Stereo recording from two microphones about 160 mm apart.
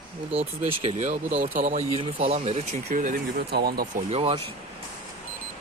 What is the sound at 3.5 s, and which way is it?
Speech, 80° right.